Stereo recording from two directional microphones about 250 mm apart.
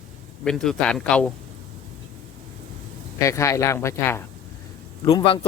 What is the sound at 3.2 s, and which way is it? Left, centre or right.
Speech, centre.